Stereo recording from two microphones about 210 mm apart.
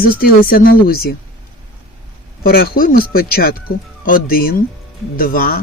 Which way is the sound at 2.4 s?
45° left (ahead or behind).